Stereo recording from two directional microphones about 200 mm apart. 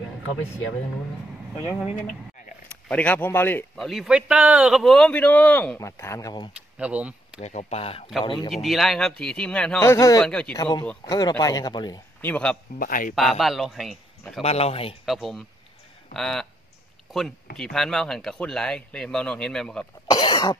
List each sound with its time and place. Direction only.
2.9 s speech: 5° left (ahead or behind)
6.8 s speech: 5° right (ahead or behind)
7.3 s speech: 30° left (ahead or behind)
8.5 s speech: centre (ahead or behind); by 10.2 s 15° left (ahead or behind)
10.2 s speech: 5° left (ahead or behind)
10.6 s speech: 20° left (ahead or behind)
12.2 s speech: 5° left (ahead or behind)
12.7 s a man's voice: 45° left (ahead or behind)
13.1 s speech: centre (ahead or behind)
14.4 s speech: 30° left (ahead or behind)
15.0 s speech: centre (ahead or behind)
17.6 s speech: centre (ahead or behind)
20.1 s cough: 20° left (ahead or behind)